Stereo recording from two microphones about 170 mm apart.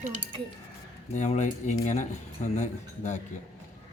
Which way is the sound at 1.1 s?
45° left (ahead or behind).